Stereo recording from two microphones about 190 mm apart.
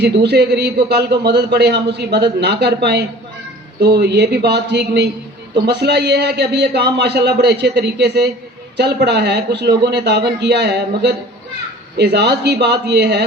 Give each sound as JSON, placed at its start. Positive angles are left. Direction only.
{"t": 0.0, "sound": "a man's voice", "side_deg": -60}